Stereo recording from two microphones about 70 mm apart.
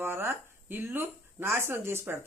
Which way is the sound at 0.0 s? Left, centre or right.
Right.